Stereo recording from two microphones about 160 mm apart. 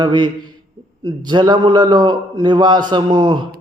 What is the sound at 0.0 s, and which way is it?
A man's voice, 25° right (ahead or behind).